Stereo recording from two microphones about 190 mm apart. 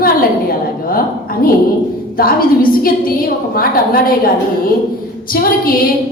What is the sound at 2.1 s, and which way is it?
Speech, 50° left (ahead or behind).